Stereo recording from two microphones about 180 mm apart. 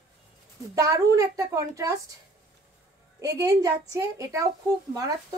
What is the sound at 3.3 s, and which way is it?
A woman's voice, 20° right (ahead or behind).